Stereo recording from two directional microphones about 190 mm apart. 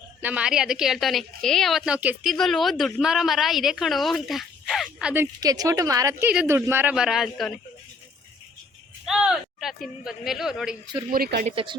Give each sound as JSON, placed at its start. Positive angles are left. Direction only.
{"t": 0.2, "sound": "a woman's voice", "side_deg": -5}
{"t": 9.0, "sound": "speech", "side_deg": 0}
{"t": 11.1, "sound": "speech", "side_deg": -50}
{"t": 11.4, "sound": "speech", "side_deg": -25}